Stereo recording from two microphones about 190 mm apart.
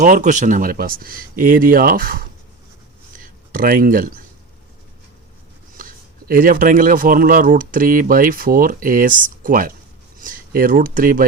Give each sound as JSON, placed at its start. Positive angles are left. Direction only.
{"t": 0.0, "sound": "speech", "side_deg": -40}
{"t": 3.5, "sound": "speech", "side_deg": -45}
{"t": 5.7, "sound": "speech", "side_deg": -45}